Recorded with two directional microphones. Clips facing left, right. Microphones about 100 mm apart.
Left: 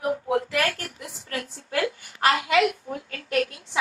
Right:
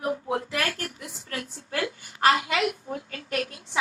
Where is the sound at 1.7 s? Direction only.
30° right (ahead or behind).